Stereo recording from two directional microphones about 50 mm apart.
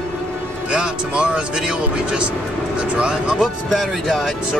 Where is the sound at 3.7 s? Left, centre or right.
Centre.